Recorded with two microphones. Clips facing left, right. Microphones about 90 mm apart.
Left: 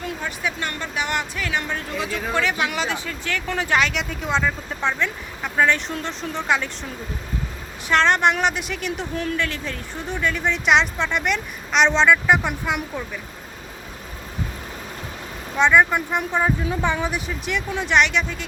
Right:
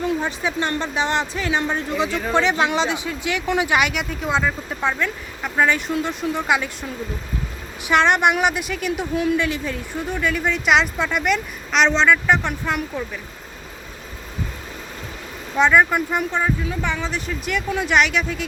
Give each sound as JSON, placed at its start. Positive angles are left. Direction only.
{"t": 0.2, "sound": "speech", "side_deg": -30}
{"t": 7.9, "sound": "a woman's voice", "side_deg": -15}
{"t": 15.5, "sound": "a woman's voice", "side_deg": 0}
{"t": 16.6, "sound": "a woman's voice", "side_deg": 15}